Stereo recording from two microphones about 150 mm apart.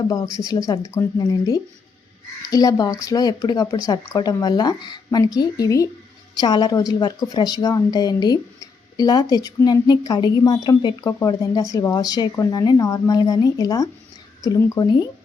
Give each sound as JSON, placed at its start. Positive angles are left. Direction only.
{"t": 0.1, "sound": "speech", "side_deg": 25}